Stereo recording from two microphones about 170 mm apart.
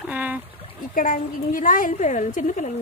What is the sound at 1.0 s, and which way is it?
Speech, 55° left (ahead or behind).